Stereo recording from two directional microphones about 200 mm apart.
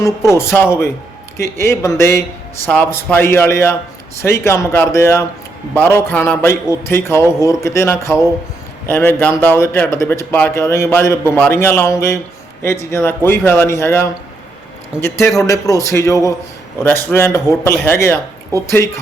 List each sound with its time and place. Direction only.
0.3 s a man's voice: 10° left (ahead or behind)
14.9 s speech: 5° right (ahead or behind)
15.4 s a man's voice: 15° left (ahead or behind)